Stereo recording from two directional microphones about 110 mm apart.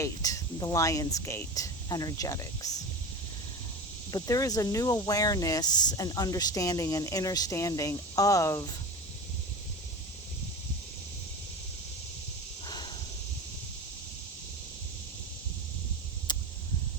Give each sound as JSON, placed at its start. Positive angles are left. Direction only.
{"t": 0.0, "sound": "speech", "side_deg": 30}
{"t": 4.1, "sound": "speech", "side_deg": 30}
{"t": 12.6, "sound": "a sound", "side_deg": 40}